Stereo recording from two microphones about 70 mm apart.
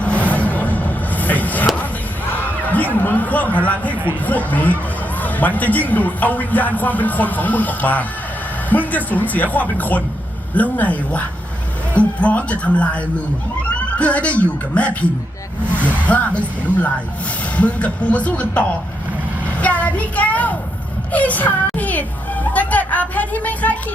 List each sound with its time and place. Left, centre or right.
0.0 s vehicle: centre
2.3 s a sound: left
3.6 s a woman's voice: left
16.0 s speech: left
17.6 s speech: centre
19.5 s a sound: left
21.1 s speech: left